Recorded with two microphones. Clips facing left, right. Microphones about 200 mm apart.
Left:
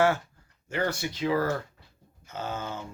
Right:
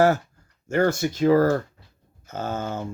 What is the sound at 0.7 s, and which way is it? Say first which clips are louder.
Speech: right 8 dB; 45° right (ahead or behind).